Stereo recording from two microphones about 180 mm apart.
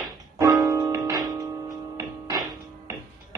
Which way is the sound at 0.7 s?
20° right (ahead or behind).